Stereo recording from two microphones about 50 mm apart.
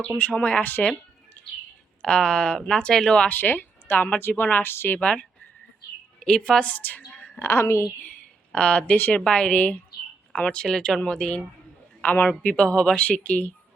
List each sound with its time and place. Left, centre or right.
0.2 s speech: left
0.6 s speech: left
2.0 s speech: centre
2.9 s speech: centre
3.2 s speech: left
4.6 s a woman's voice: left
4.9 s a woman's voice: centre
6.6 s speech: left
7.3 s a woman's voice: left
8.5 s speech: left
9.0 s speech: left
9.2 s speech: centre